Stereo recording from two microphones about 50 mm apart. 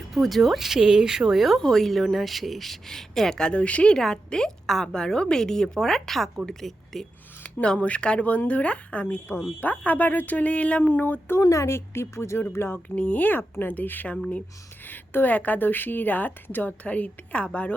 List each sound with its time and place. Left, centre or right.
0.1 s speech: centre
1.5 s a woman's voice: centre
3.9 s a woman's voice: centre
7.4 s a woman's voice: left
9.0 s a woman's voice: left
11.3 s speech: left
12.5 s a woman's voice: left
13.0 s a woman's voice: left
16.8 s a woman's voice: left